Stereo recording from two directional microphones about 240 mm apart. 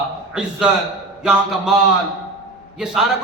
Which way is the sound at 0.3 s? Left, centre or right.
Centre.